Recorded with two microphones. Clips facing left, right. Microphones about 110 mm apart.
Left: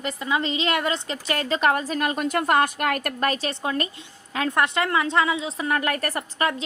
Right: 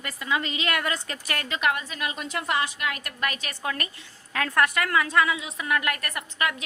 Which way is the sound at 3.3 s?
30° left (ahead or behind).